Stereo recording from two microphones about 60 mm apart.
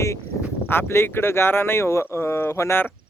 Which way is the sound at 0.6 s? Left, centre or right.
Left.